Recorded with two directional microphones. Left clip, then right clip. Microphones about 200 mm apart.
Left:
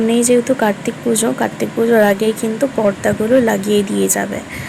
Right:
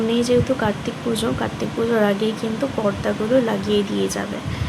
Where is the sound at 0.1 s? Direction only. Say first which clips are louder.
Left 5 dB; 25° left (ahead or behind).